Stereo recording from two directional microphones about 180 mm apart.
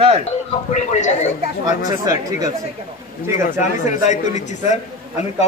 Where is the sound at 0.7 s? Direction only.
40° left (ahead or behind).